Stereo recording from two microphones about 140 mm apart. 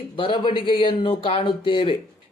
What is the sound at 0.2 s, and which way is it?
Speech, 35° left (ahead or behind).